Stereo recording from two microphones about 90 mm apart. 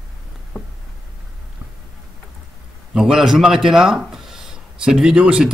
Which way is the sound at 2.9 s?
5° right (ahead or behind).